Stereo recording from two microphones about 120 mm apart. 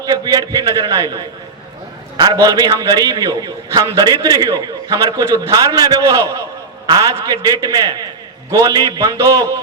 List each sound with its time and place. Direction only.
0.0 s a man's voice: 30° right (ahead or behind)